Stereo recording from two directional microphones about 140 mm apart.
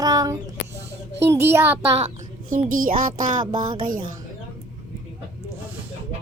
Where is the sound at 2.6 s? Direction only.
70° right (ahead or behind).